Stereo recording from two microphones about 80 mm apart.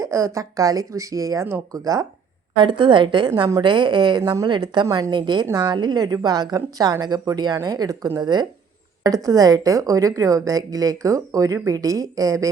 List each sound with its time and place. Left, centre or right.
0.0 s a woman's voice: right
1.7 s a woman's voice: right
2.6 s a woman's voice: right
8.2 s a woman's voice: right
9.0 s a woman's voice: right